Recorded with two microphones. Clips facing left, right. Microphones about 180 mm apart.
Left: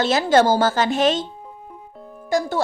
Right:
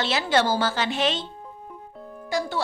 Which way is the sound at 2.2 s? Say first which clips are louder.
Left 6 dB; 45° left (ahead or behind).